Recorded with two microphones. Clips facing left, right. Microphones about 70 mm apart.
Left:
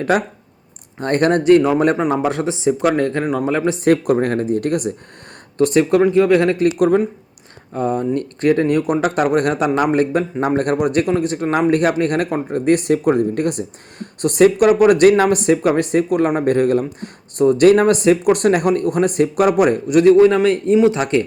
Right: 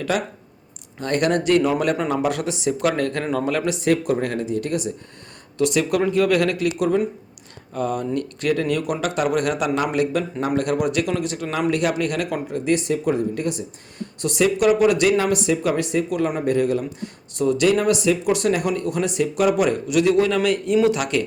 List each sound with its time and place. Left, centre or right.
0.9 s a man's voice: left
3.8 s speech: left
5.5 s a man's voice: left
6.0 s speech: left
6.7 s speech: left
7.7 s a man's voice: left